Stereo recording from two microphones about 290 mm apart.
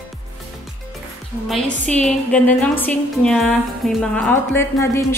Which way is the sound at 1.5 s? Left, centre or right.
Centre.